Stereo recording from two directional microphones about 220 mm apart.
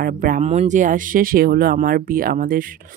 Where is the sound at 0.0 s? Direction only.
40° right (ahead or behind).